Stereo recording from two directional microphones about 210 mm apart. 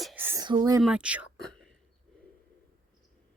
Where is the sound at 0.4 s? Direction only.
20° right (ahead or behind).